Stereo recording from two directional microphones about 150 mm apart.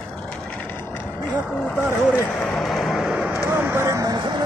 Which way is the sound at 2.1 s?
10° left (ahead or behind).